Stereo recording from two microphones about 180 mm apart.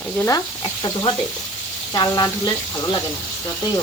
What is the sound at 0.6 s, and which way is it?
Speech, 25° left (ahead or behind).